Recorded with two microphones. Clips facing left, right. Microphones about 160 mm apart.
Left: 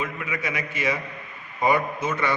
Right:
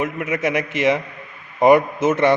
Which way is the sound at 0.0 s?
75° right (ahead or behind).